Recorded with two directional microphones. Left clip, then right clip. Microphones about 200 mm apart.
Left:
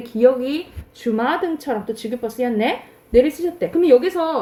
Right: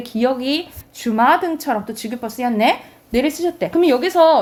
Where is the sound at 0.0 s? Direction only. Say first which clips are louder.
Left 4 dB; 25° right (ahead or behind).